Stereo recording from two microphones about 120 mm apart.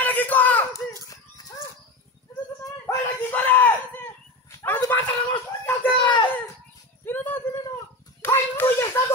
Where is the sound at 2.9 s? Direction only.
20° left (ahead or behind).